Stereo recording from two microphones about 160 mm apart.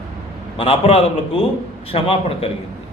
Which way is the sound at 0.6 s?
40° left (ahead or behind).